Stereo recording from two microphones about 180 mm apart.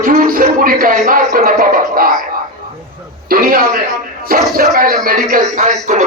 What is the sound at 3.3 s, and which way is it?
A man's voice, 55° right (ahead or behind).